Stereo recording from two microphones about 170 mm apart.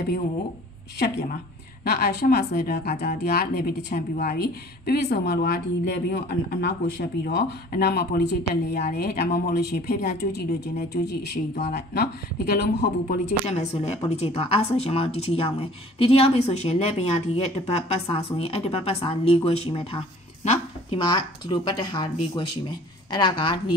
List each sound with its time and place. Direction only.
0.9 s speech: 75° left (ahead or behind)
8.8 s speech: 60° left (ahead or behind); by 11.1 s 80° left
11.5 s speech: 45° left (ahead or behind)
11.9 s speech: 70° left (ahead or behind)
13.5 s speech: 40° left (ahead or behind)